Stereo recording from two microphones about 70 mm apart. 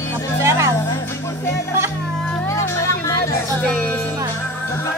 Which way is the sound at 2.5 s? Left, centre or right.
Left.